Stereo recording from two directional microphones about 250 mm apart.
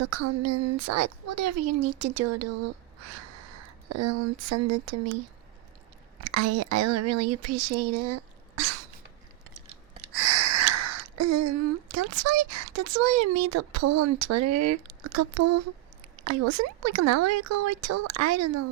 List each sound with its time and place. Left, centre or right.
0.0 s speech: right
6.2 s speech: right
10.2 s speech: right